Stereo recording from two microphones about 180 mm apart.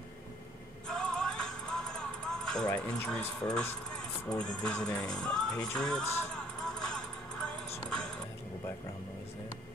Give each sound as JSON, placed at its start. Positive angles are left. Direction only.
{"t": 0.8, "sound": "music", "side_deg": 5}
{"t": 4.3, "sound": "speech", "side_deg": 5}
{"t": 6.7, "sound": "music", "side_deg": 5}